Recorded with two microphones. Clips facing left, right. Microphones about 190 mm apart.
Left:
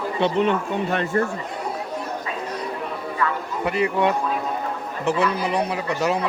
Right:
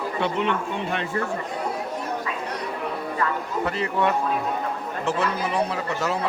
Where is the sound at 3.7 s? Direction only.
15° left (ahead or behind).